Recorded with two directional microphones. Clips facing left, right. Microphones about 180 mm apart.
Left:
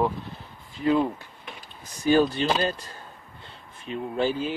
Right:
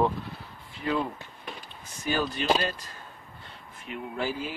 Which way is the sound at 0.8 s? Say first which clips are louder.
Left 7 dB; 30° left (ahead or behind).